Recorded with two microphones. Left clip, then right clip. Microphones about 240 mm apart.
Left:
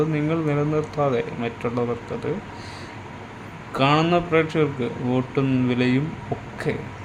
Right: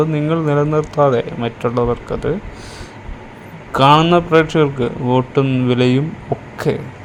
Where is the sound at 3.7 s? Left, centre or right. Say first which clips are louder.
Right 9 dB; right.